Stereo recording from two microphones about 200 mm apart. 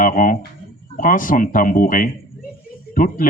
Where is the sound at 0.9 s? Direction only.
40° left (ahead or behind).